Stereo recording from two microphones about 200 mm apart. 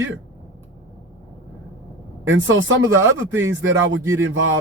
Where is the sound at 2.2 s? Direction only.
75° right (ahead or behind).